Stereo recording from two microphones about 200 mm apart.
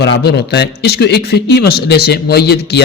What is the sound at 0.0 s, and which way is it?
Speech, 55° left (ahead or behind).